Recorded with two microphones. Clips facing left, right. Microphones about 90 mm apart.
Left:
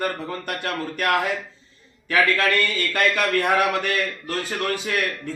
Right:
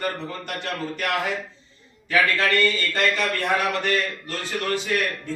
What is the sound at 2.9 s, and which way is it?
Speech, 60° left (ahead or behind).